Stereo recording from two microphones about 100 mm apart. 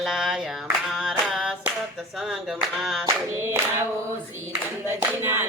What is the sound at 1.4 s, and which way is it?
Hands, 10° right (ahead or behind).